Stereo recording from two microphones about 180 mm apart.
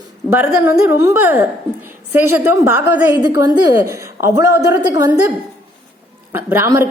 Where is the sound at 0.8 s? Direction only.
15° right (ahead or behind).